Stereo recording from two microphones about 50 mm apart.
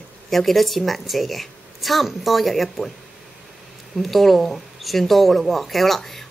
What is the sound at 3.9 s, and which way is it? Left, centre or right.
A woman's voice, centre.